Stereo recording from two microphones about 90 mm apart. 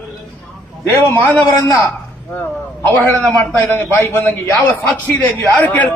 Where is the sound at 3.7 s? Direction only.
25° left (ahead or behind).